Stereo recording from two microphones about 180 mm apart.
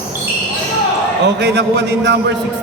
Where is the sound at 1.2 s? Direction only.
70° right (ahead or behind).